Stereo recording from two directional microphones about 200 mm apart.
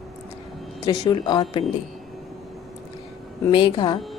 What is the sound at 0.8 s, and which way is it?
Speech, 20° left (ahead or behind).